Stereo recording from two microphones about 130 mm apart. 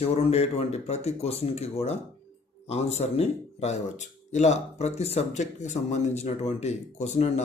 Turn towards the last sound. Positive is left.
turn(degrees=60)  # may be behind; listen again after turning